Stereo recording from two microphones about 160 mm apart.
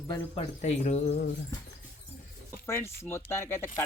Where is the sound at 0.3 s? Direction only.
45° left (ahead or behind).